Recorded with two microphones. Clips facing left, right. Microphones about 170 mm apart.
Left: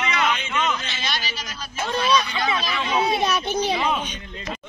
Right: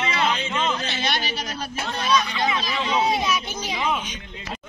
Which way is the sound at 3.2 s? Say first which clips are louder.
Left 4 dB; 60° left (ahead or behind).